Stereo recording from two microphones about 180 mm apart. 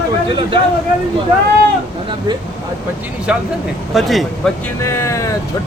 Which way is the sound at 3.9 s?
Centre (ahead or behind).